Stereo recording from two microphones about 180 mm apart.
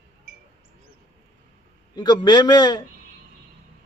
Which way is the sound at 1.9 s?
25° left (ahead or behind).